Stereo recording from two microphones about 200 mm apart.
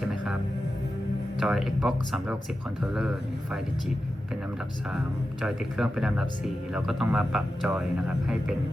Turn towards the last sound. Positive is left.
turn(degrees=0)  # may be behind; listen again after turning